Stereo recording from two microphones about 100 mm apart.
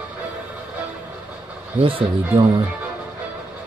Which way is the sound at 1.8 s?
65° right (ahead or behind).